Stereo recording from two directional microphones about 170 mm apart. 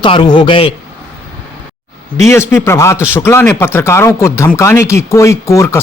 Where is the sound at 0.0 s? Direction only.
25° left (ahead or behind).